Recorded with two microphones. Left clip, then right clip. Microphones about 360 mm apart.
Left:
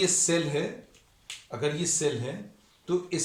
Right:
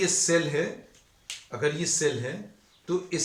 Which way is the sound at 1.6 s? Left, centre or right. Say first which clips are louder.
Right 2 dB; centre.